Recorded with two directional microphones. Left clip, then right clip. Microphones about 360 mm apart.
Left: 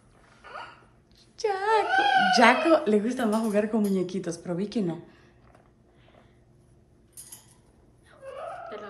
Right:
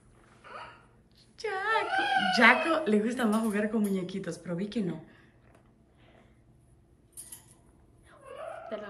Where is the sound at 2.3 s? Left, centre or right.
Centre.